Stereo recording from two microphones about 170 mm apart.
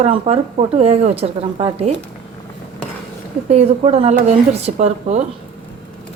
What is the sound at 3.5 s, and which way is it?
A woman's voice, 40° right (ahead or behind).